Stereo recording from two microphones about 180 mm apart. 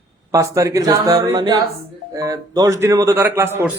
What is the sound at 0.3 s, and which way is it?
A man's voice, 20° right (ahead or behind).